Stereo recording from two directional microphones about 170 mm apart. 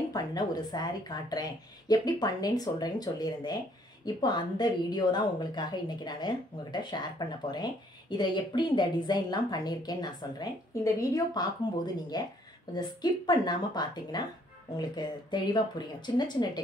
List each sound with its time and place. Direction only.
0.1 s speech: 25° left (ahead or behind)